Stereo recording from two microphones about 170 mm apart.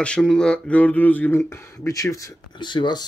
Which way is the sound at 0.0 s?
5° left (ahead or behind).